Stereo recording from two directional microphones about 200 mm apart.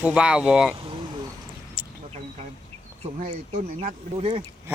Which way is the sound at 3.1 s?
35° right (ahead or behind).